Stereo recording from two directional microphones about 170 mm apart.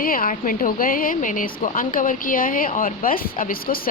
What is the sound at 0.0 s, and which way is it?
A woman's voice, 55° left (ahead or behind).